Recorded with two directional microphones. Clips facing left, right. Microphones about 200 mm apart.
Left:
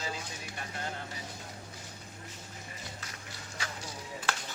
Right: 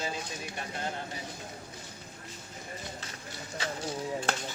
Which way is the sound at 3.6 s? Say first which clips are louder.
Right 8 dB; 25° right (ahead or behind).